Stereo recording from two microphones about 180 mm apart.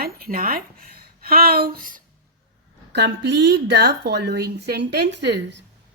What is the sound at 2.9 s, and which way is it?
A woman's voice, 75° right (ahead or behind).